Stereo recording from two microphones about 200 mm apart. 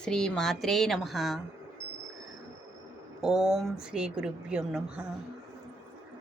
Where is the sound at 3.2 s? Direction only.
Centre (ahead or behind).